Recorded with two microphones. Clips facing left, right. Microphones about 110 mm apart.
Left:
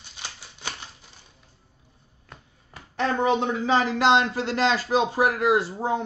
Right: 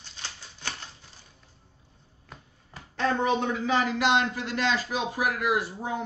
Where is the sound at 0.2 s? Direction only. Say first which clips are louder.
Left 2 dB; 15° left (ahead or behind).